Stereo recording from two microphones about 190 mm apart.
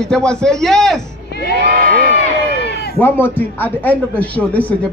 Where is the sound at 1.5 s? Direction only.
60° right (ahead or behind).